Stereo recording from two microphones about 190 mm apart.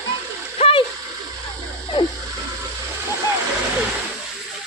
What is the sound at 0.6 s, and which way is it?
Splash, 30° left (ahead or behind).